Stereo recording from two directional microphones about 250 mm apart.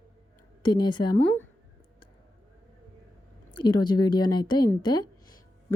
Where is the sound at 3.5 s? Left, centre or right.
Centre.